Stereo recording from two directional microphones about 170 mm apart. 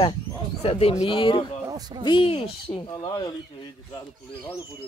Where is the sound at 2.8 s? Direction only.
20° left (ahead or behind).